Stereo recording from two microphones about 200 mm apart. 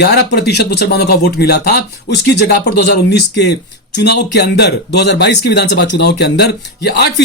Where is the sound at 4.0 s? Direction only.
55° left (ahead or behind).